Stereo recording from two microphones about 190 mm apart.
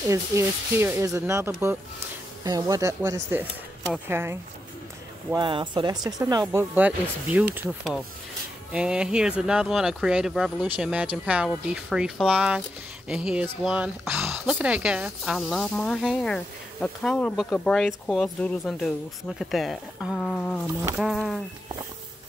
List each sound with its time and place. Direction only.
0.1 s speech: 15° right (ahead or behind)
5.3 s speech: 25° right (ahead or behind); by 7.6 s 10° right (ahead or behind)
8.7 s speech: 5° right (ahead or behind)